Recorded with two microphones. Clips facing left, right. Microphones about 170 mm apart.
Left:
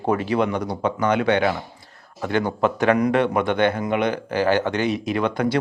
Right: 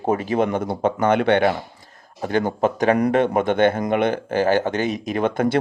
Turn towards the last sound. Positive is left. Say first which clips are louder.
# right 1 dB
turn(degrees=-50)  # may be behind; listen again after turning